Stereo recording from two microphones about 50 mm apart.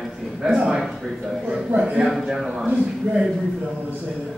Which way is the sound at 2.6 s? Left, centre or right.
Right.